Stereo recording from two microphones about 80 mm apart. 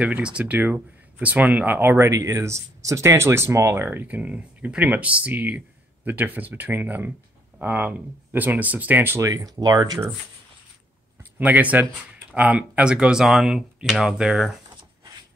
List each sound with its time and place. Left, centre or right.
0.0 s speech: centre
9.2 s speech: right
11.3 s speech: right; by 14.6 s centre